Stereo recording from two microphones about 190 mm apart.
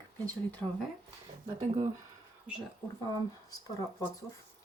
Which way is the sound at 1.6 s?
20° right (ahead or behind).